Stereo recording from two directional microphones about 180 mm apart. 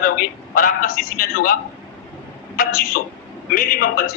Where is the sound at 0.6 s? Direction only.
55° left (ahead or behind).